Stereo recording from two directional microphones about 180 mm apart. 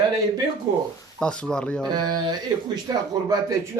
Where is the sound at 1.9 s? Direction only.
20° right (ahead or behind).